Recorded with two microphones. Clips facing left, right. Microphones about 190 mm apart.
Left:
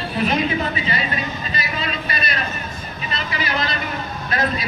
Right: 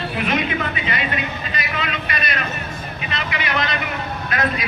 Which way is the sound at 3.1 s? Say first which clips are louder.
Even; 35° left (ahead or behind).